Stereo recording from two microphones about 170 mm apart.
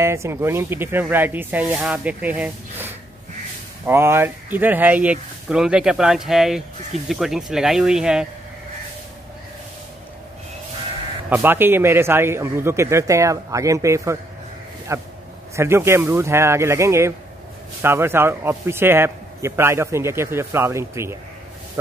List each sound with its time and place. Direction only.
0.0 s a man's voice: 15° right (ahead or behind)
11.2 s a man's voice: 10° right (ahead or behind)